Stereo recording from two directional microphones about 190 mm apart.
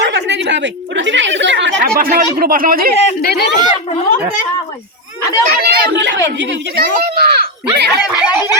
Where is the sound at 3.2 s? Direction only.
55° left (ahead or behind).